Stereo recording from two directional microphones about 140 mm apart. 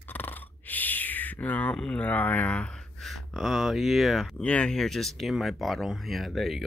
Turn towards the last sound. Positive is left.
turn(degrees=0)  # may be behind; listen again after turning